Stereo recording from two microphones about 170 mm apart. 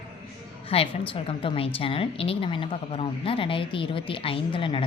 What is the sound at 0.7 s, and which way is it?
A woman's voice, 35° left (ahead or behind).